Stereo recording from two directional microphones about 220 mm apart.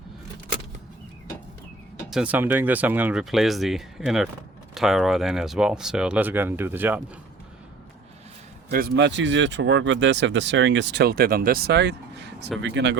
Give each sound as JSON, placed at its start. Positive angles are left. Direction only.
{"t": 2.0, "sound": "speech", "side_deg": -5}
{"t": 8.7, "sound": "speech", "side_deg": -45}